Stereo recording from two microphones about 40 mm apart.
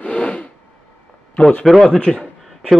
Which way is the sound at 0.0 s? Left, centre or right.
Left.